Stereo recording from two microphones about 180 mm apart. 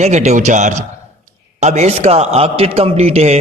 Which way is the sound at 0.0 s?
40° right (ahead or behind).